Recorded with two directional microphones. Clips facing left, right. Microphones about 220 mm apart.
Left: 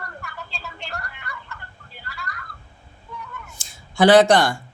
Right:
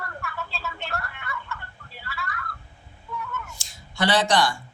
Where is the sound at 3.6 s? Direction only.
50° left (ahead or behind).